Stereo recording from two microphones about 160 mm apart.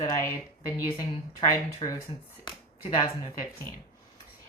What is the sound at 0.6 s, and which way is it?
Speech, 20° left (ahead or behind).